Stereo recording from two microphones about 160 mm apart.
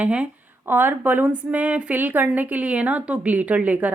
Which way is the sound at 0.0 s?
10° right (ahead or behind).